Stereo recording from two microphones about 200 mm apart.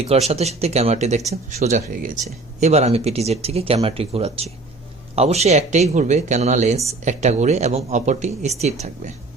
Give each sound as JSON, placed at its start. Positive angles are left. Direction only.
{"t": 0.0, "sound": "speech", "side_deg": -30}